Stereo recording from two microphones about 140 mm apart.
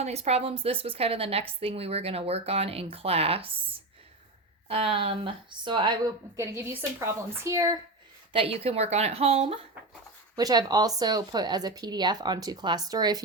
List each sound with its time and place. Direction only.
0.0 s a woman's voice: 50° right (ahead or behind); by 7.8 s 20° right (ahead or behind)
8.3 s a woman's voice: 40° right (ahead or behind)
10.3 s a woman's voice: 30° right (ahead or behind)